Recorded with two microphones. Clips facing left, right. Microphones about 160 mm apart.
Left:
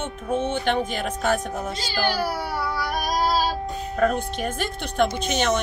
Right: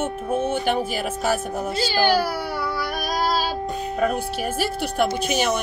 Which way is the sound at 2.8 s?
65° right (ahead or behind).